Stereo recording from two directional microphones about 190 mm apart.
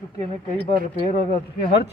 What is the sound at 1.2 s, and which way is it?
Speech, 55° left (ahead or behind).